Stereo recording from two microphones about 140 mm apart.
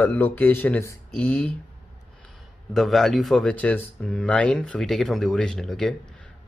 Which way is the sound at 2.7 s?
Centre (ahead or behind).